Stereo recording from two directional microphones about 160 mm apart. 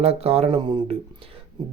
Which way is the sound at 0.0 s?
40° right (ahead or behind).